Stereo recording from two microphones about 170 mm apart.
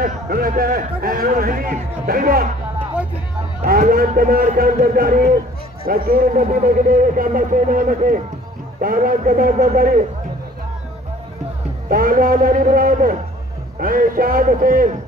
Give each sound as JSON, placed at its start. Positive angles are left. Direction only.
{"t": 0.0, "sound": "a man's voice", "side_deg": -60}
{"t": 3.6, "sound": "a man's voice", "side_deg": -55}
{"t": 11.9, "sound": "a man's voice", "side_deg": -55}